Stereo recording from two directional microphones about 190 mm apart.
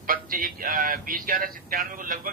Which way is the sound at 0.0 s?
45° right (ahead or behind).